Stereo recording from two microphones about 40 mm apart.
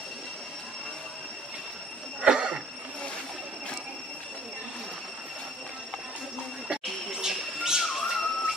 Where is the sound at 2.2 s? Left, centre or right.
Right.